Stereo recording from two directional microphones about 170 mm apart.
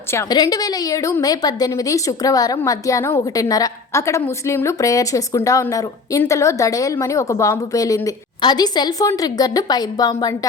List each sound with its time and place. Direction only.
0.1 s a woman's voice: 20° left (ahead or behind)